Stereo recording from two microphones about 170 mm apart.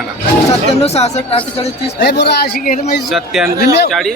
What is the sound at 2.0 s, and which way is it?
Speech, 85° left.